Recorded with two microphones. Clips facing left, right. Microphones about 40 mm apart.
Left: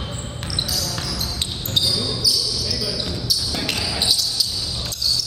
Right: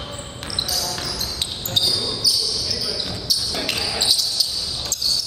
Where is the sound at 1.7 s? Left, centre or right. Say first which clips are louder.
Even; centre.